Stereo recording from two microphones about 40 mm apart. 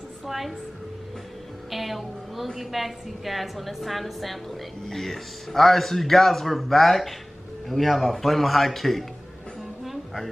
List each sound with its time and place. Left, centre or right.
0.3 s a woman's voice: centre
1.7 s a woman's voice: centre